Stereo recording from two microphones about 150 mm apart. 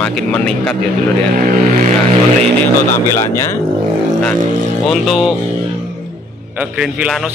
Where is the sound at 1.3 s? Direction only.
65° right (ahead or behind).